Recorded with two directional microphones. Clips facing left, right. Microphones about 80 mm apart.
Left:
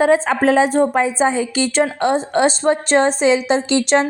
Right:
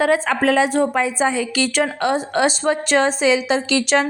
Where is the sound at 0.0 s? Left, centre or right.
Left.